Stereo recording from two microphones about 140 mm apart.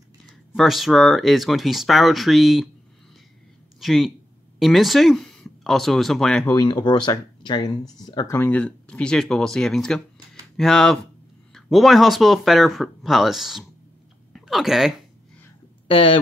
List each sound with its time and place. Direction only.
0.6 s speech: centre (ahead or behind)
3.8 s speech: centre (ahead or behind)
6.7 s speech: 35° left (ahead or behind)
8.4 s speech: 10° left (ahead or behind)
15.9 s speech: 40° left (ahead or behind)